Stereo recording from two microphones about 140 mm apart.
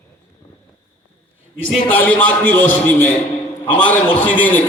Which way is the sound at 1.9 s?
10° left (ahead or behind).